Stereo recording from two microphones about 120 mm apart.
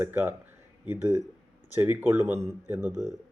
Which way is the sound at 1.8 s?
20° right (ahead or behind).